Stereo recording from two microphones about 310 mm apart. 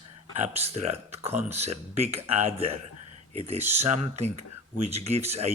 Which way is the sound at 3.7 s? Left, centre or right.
Right.